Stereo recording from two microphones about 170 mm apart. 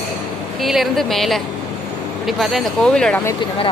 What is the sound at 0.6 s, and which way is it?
Speech, centre (ahead or behind).